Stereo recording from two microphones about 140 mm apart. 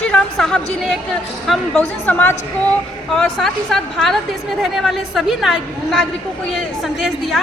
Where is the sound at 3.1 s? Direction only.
5° left (ahead or behind).